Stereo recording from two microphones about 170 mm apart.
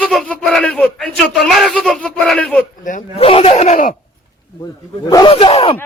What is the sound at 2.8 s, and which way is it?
Speech, 50° left (ahead or behind).